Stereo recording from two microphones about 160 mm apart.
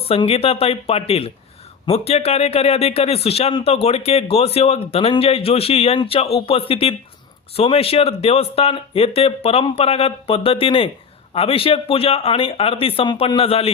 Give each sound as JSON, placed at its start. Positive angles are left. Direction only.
{"t": 0.1, "sound": "speech", "side_deg": 35}